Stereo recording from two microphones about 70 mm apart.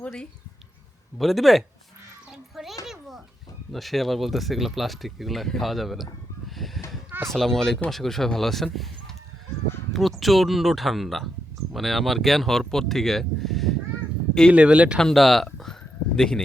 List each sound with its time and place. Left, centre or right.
1.2 s speech: centre
2.8 s children playing: centre
3.7 s speech: centre
14.5 s speech: centre
14.9 s a sound: centre